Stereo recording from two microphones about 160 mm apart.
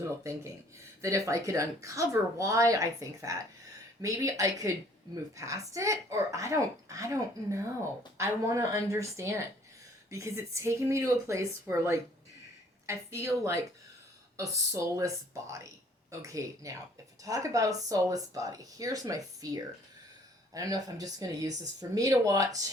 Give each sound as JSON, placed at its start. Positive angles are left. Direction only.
{"t": 0.0, "sound": "a woman's voice", "side_deg": -20}